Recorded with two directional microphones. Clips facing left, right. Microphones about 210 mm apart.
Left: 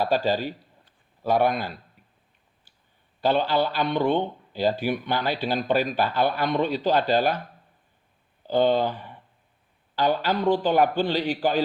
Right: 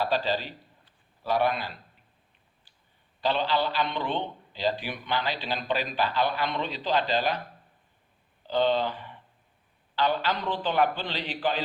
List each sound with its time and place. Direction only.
0.0 s a man's voice: 45° left (ahead or behind)
3.2 s a man's voice: 45° left (ahead or behind)
8.4 s a man's voice: 45° left (ahead or behind)